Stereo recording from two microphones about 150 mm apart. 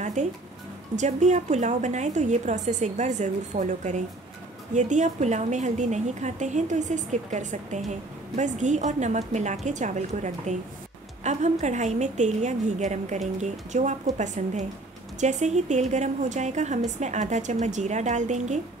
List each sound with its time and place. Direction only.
0.0 s music: 50° right (ahead or behind)
0.9 s a woman's voice: 50° right (ahead or behind)